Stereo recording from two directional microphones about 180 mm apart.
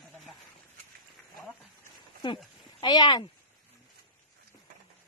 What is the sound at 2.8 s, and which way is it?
Speech, 25° left (ahead or behind).